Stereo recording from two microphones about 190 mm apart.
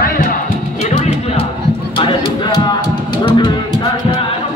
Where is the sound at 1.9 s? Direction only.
25° left (ahead or behind).